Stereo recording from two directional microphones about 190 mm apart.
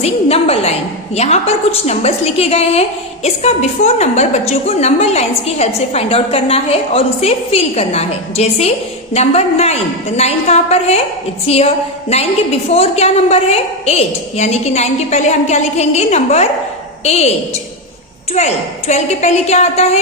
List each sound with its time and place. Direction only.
0.0 s a woman's voice: 30° left (ahead or behind)
18.3 s a woman's voice: 35° left (ahead or behind)